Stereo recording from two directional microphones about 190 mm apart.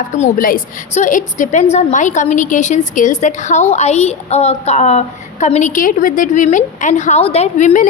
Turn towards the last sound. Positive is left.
turn(degrees=40)  # may be behind; listen again after turning